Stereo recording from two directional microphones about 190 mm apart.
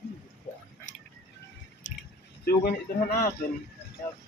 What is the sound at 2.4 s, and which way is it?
Speech, 55° left (ahead or behind).